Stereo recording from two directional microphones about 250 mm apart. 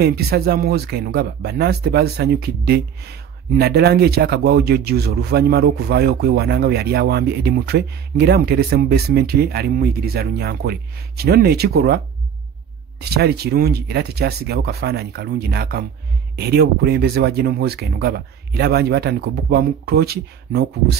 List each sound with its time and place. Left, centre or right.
0.0 s speech: right
13.0 s speech: right